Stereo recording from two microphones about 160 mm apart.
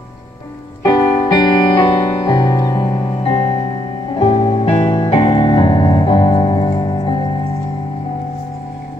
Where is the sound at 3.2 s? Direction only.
40° left (ahead or behind).